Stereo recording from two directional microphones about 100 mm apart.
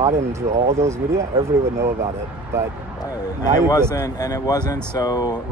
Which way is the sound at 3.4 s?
40° left (ahead or behind).